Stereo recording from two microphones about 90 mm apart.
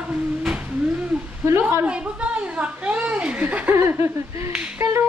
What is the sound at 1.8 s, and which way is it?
A woman's voice, 15° right (ahead or behind).